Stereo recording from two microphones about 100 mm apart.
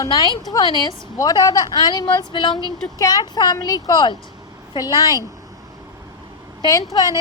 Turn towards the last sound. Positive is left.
turn(degrees=40)  # may be behind; listen again after turning